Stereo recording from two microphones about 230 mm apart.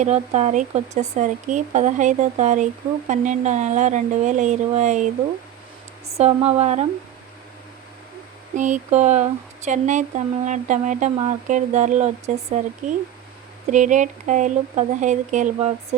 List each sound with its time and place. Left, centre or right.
0.0 s speech: right
6.1 s speech: right
8.5 s speech: right